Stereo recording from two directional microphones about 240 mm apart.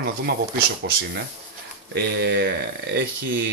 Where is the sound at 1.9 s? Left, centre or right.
Right.